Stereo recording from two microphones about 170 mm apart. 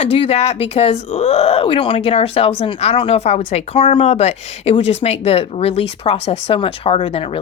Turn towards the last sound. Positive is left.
turn(degrees=35)  # may be behind; listen again after turning